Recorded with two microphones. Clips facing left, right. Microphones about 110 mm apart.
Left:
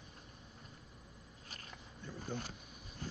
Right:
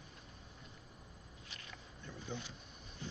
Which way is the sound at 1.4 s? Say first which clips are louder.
Left 2 dB; 45° left (ahead or behind).